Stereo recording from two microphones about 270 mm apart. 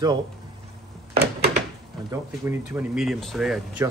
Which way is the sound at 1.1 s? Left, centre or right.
Right.